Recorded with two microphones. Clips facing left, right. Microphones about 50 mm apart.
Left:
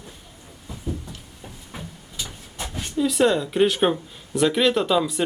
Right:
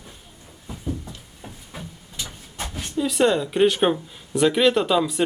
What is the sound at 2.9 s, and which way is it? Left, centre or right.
Speech, centre.